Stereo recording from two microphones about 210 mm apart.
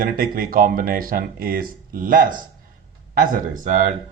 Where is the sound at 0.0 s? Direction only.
45° right (ahead or behind).